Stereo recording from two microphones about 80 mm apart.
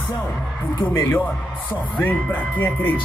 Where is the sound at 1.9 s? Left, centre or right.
Centre.